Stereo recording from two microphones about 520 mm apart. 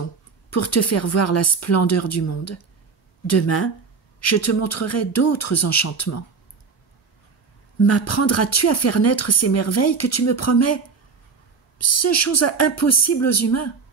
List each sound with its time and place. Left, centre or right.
0.5 s a woman's voice: left
7.8 s a woman's voice: left
11.8 s a woman's voice: left